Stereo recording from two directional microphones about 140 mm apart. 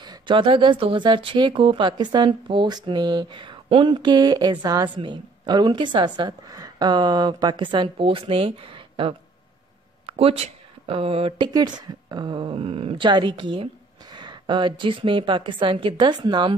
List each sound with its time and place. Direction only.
0.0 s speech: 35° right (ahead or behind)